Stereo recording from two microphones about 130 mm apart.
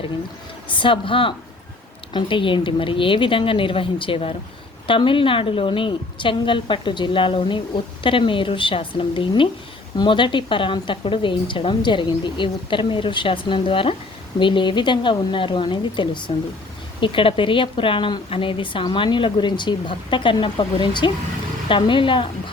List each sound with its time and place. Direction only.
0.7 s a woman's voice: 40° left (ahead or behind)